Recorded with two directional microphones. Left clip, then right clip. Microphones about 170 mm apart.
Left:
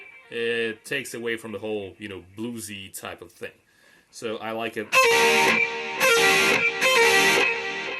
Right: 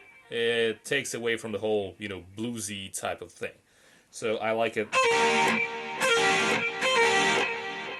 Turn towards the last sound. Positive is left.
turn(degrees=45)  # may be behind; listen again after turning